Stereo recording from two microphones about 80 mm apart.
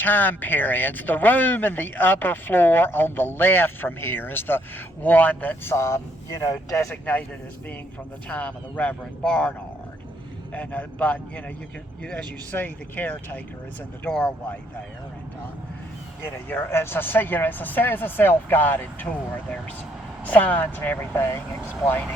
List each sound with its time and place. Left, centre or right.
0.0 s speech: left
5.7 s speech: left
6.9 s speech: centre
8.3 s speech: centre
14.1 s speech: centre
16.2 s speech: left
20.2 s speech: left